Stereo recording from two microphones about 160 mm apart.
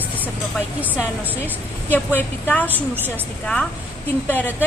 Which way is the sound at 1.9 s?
10° left (ahead or behind).